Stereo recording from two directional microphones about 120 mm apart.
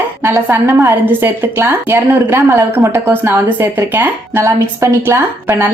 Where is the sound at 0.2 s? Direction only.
20° right (ahead or behind).